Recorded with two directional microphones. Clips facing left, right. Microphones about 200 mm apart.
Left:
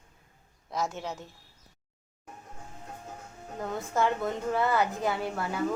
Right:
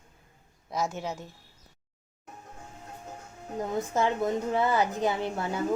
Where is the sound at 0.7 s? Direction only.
Centre (ahead or behind).